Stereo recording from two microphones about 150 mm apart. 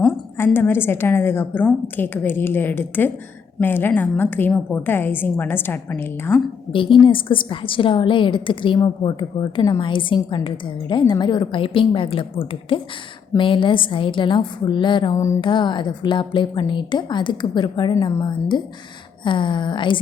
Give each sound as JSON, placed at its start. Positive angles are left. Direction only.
{"t": 0.3, "sound": "a woman's voice", "side_deg": 15}
{"t": 6.7, "sound": "a woman's voice", "side_deg": 35}